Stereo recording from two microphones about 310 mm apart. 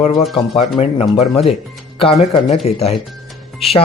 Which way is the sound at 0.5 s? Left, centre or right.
Centre.